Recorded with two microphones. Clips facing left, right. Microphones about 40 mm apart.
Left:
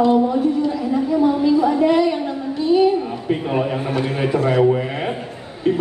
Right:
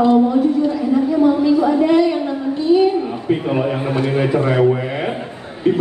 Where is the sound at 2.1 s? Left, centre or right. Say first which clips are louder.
Right 3 dB; centre.